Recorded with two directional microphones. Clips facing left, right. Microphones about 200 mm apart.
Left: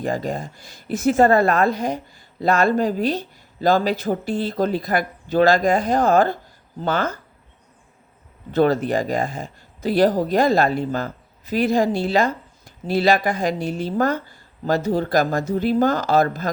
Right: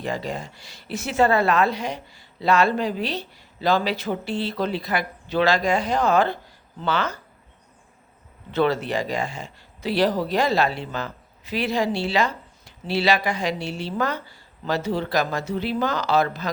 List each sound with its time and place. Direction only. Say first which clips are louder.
0.0 s speech: left 4 dB; 45° left (ahead or behind)
8.5 s speech: left 4 dB; 45° left (ahead or behind)